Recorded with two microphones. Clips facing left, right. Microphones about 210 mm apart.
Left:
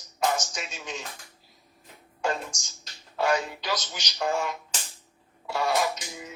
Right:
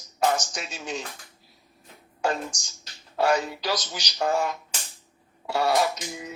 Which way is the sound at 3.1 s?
35° right (ahead or behind).